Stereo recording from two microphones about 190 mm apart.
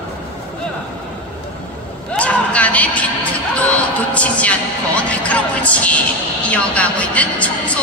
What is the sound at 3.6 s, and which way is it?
Music, 5° left (ahead or behind).